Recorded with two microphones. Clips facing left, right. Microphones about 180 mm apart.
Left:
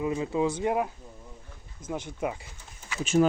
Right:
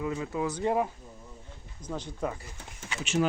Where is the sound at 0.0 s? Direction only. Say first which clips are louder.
Left 4 dB; 20° left (ahead or behind).